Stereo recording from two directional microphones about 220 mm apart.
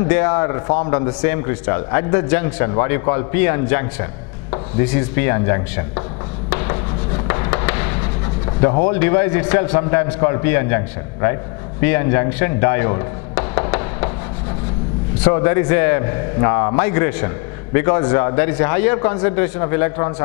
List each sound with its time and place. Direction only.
0.0 s a man's voice: 10° left (ahead or behind)
7.2 s a sound: 20° left (ahead or behind)
8.5 s a man's voice: 15° left (ahead or behind)
11.8 s music: 15° left (ahead or behind)
15.2 s a man's voice: 15° left (ahead or behind)